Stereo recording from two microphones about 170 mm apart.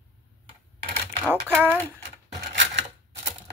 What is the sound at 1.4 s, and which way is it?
Speech, 10° right (ahead or behind).